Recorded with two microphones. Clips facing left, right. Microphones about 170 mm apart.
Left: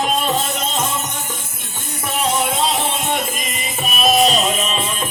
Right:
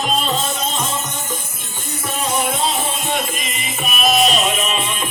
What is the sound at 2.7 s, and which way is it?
Music, 70° left (ahead or behind).